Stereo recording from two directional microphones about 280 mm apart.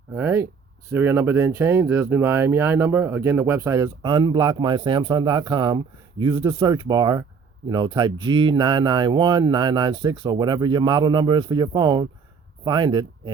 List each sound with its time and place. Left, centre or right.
0.2 s speech: centre